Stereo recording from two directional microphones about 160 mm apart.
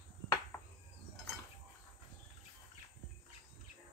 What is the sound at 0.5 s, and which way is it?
Chicken, 15° left (ahead or behind).